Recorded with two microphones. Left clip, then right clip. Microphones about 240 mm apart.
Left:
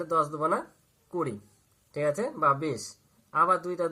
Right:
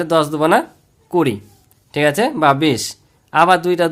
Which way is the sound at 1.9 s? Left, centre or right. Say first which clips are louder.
Right 13 dB; right.